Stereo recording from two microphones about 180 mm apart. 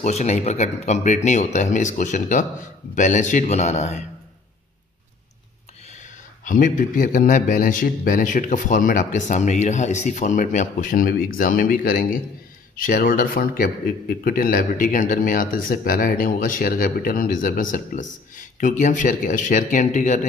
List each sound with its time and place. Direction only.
0.0 s speech: 40° left (ahead or behind)
5.9 s speech: 45° left (ahead or behind)